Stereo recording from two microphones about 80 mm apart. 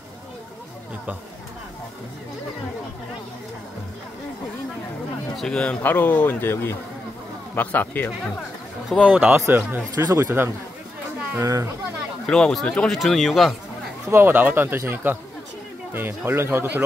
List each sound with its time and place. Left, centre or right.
5.3 s speech: centre
5.8 s speech: left
9.0 s speech: centre
9.3 s speech: right
11.3 s a child's voice: right
12.3 s speech: centre
14.0 s speech: right